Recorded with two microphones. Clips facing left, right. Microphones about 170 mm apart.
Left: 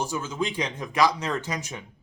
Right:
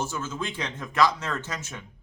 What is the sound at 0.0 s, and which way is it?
A man's voice, 15° left (ahead or behind).